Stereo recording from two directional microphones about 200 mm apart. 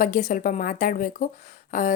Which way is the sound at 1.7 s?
40° left (ahead or behind).